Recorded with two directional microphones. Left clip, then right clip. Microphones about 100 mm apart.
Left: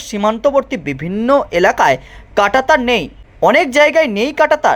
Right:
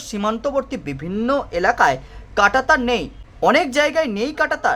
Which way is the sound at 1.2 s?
45° left (ahead or behind).